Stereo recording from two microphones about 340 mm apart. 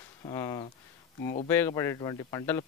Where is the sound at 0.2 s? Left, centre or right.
Centre.